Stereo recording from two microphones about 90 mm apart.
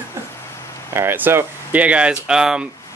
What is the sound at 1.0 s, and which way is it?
Speech, 25° right (ahead or behind).